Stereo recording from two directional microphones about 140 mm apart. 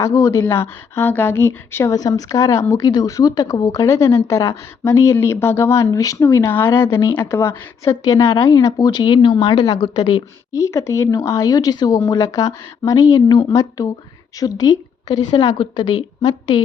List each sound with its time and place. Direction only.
0.0 s speech: 20° left (ahead or behind)